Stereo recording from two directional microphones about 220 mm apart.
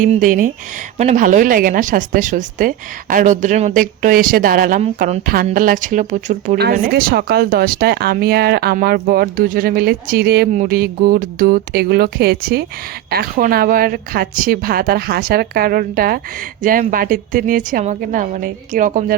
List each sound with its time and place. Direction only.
0.0 s speech: 35° right (ahead or behind)
4.8 s speech: 30° right (ahead or behind)